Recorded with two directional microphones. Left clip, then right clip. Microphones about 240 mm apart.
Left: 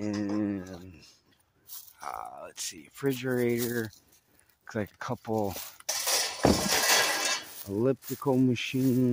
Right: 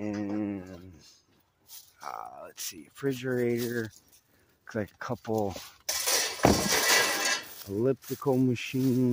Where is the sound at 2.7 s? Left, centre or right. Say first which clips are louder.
Left 1 dB; centre.